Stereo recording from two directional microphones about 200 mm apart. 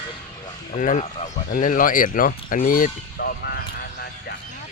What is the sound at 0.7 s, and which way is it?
Speech, 35° left (ahead or behind).